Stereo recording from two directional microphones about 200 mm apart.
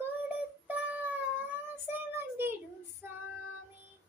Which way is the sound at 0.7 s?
5° right (ahead or behind).